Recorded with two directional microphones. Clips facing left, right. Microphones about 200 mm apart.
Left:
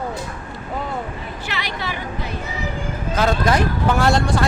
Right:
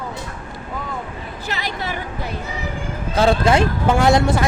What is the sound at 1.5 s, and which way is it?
Speech, 45° right (ahead or behind).